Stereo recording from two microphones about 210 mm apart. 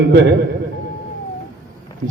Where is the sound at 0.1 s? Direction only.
50° right (ahead or behind).